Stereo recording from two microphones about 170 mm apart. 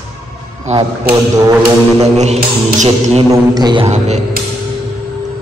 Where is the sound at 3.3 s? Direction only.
25° right (ahead or behind).